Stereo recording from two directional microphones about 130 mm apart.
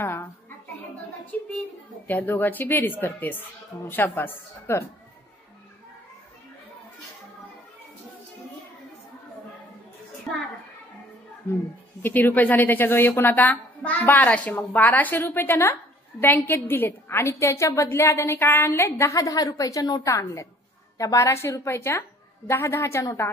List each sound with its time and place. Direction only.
0.0 s a sound: 15° left (ahead or behind)
1.3 s a woman's voice: 10° left (ahead or behind)
12.0 s a woman's voice: 15° left (ahead or behind)